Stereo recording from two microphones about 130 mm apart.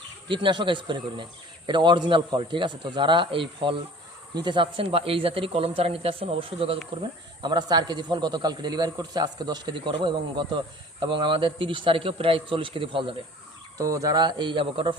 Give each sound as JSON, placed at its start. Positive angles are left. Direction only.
{"t": 0.3, "sound": "speech", "side_deg": -40}
{"t": 7.4, "sound": "speech", "side_deg": -35}
{"t": 13.7, "sound": "speech", "side_deg": -25}